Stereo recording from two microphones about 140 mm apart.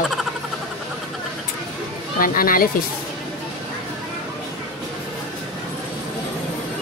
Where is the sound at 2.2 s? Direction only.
90° left.